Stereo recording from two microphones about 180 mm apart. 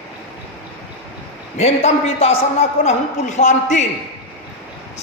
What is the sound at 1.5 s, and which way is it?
A man's voice, 35° left (ahead or behind).